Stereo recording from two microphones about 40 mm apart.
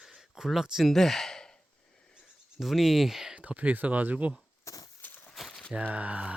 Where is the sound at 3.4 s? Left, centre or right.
Right.